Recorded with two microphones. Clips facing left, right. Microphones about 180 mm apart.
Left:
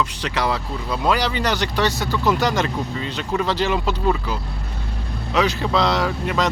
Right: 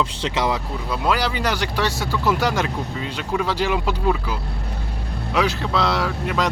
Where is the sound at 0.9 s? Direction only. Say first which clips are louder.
Left 1 dB; 5° right (ahead or behind).